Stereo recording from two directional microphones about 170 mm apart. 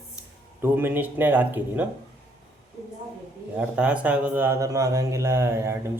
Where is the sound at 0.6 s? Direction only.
10° right (ahead or behind).